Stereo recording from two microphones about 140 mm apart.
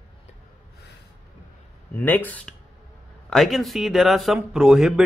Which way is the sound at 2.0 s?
10° left (ahead or behind).